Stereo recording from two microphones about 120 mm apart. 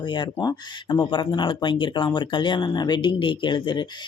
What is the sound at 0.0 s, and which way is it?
Speech, 40° left (ahead or behind).